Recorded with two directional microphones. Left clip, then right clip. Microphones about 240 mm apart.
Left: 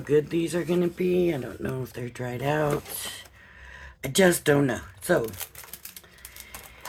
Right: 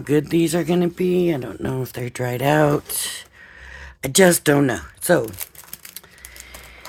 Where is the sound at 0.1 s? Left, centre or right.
Right.